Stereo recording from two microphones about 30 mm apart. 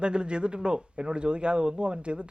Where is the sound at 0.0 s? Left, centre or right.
Right.